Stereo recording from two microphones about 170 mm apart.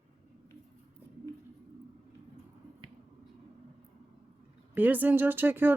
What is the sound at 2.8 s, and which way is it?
Finger snapping, 25° right (ahead or behind).